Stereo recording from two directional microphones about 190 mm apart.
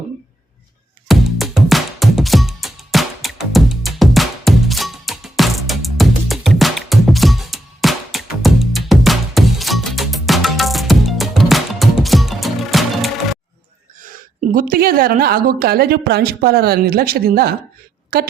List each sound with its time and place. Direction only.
1.0 s music: centre (ahead or behind)
14.5 s a woman's voice: 50° right (ahead or behind)